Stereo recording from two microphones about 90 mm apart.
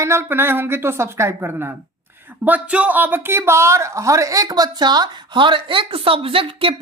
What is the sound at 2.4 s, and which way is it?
Speech, 15° right (ahead or behind).